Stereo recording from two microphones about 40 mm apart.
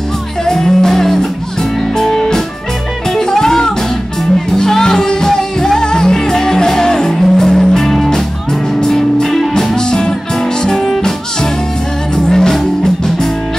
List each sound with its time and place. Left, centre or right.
0.5 s music: centre
9.8 s music: centre
12.2 s music: centre